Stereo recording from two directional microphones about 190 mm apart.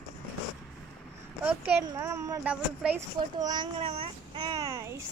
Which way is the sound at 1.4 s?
10° right (ahead or behind).